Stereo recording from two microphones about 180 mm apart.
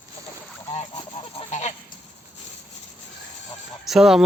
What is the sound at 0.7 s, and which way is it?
Goose, 35° left (ahead or behind).